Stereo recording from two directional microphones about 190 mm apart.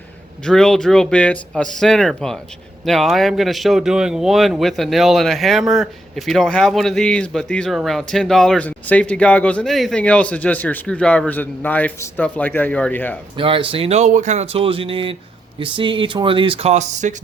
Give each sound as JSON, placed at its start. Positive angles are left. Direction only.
{"t": 0.4, "sound": "speech", "side_deg": 5}
{"t": 13.3, "sound": "speech", "side_deg": -25}